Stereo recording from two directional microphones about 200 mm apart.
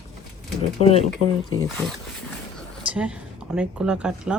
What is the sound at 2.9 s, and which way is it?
Speech, 5° right (ahead or behind).